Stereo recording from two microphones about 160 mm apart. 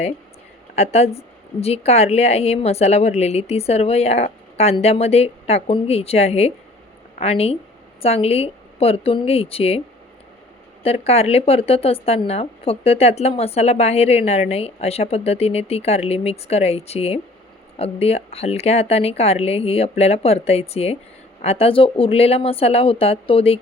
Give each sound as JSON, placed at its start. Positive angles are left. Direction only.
{"t": 0.8, "sound": "speech", "side_deg": 40}
{"t": 10.8, "sound": "speech", "side_deg": 40}